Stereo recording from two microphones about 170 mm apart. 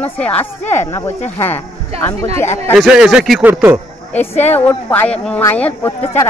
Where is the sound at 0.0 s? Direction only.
10° left (ahead or behind).